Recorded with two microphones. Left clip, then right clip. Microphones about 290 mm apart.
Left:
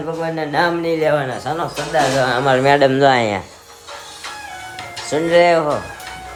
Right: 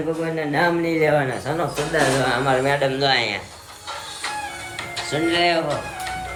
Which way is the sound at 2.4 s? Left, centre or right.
Left.